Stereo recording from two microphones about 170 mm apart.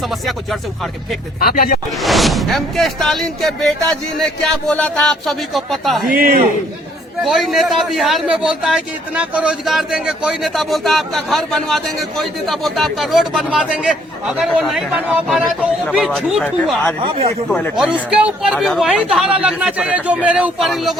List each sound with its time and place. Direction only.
1.4 s speech: 60° left (ahead or behind)
2.0 s a man's voice: centre (ahead or behind)
6.1 s a man's voice: 55° right (ahead or behind)
7.3 s a man's voice: centre (ahead or behind)
17.5 s a man's voice: centre (ahead or behind)